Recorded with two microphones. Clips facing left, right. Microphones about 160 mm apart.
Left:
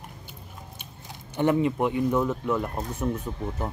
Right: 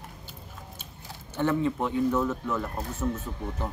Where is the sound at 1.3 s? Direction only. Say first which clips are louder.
Left 3 dB; 15° left (ahead or behind).